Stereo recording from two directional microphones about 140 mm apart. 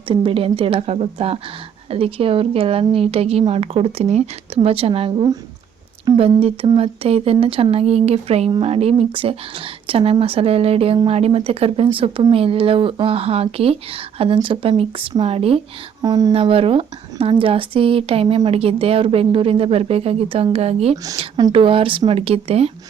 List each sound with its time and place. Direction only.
0.1 s speech: 40° right (ahead or behind)
16.0 s speech: 25° right (ahead or behind)
16.3 s speech: 40° right (ahead or behind)